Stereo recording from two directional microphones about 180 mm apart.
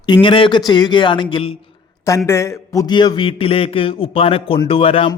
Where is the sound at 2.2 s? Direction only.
15° left (ahead or behind).